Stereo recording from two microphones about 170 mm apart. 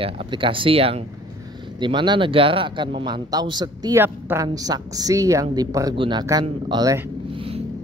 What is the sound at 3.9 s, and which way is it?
A woman's voice, 10° right (ahead or behind).